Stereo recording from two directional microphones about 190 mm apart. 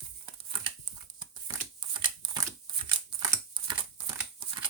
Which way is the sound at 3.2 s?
20° right (ahead or behind).